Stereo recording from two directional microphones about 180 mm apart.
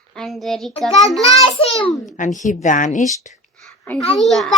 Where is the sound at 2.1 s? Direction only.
45° left (ahead or behind).